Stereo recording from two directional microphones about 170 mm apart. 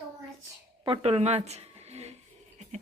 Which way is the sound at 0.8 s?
35° right (ahead or behind).